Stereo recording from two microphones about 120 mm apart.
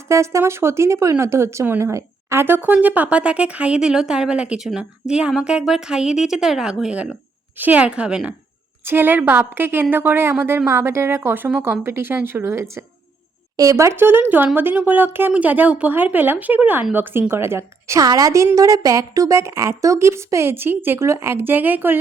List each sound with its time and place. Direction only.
0.1 s a woman's voice: 25° right (ahead or behind)